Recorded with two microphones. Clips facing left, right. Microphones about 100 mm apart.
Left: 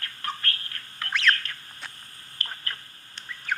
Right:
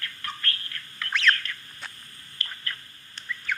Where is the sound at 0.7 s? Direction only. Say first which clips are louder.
Even; 40° left (ahead or behind).